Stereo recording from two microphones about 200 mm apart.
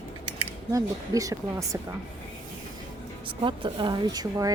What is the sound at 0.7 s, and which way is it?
Speech, 15° right (ahead or behind).